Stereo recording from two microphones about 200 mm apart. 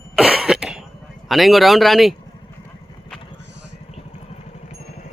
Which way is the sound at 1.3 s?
Centre (ahead or behind).